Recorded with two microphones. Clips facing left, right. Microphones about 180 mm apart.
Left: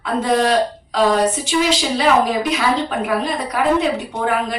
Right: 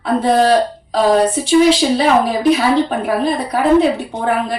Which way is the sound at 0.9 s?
35° right (ahead or behind).